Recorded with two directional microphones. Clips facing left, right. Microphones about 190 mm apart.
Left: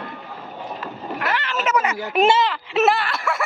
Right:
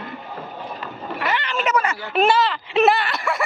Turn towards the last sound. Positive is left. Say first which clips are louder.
# right 1 dB
turn(degrees=0)  # may be behind; listen again after turning